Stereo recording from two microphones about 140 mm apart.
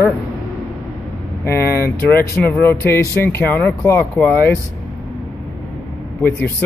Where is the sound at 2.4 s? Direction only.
15° left (ahead or behind).